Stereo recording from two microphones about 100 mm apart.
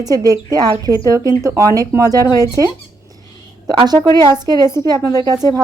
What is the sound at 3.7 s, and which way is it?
Speech, 45° right (ahead or behind).